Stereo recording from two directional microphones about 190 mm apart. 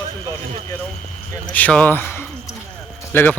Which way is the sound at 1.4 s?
5° left (ahead or behind).